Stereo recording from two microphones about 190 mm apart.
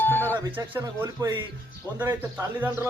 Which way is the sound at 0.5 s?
10° right (ahead or behind).